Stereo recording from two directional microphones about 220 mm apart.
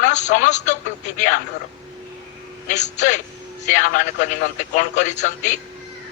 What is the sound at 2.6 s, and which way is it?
A man's voice, 35° left (ahead or behind).